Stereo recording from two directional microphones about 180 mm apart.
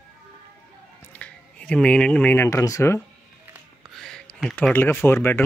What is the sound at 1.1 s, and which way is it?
Speech, 5° left (ahead or behind).